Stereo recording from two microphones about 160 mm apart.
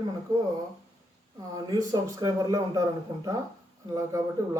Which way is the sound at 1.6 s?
25° right (ahead or behind).